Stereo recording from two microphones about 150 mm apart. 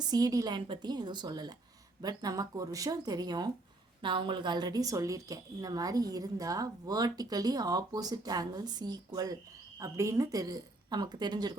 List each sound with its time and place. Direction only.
0.1 s a woman's voice: 25° right (ahead or behind)